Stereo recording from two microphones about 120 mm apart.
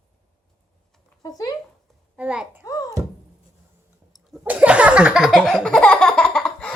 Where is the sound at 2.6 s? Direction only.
30° left (ahead or behind).